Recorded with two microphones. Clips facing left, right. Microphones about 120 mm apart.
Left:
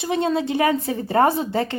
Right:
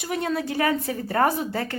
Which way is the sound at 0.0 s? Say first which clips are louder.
Left 5 dB; 25° left (ahead or behind).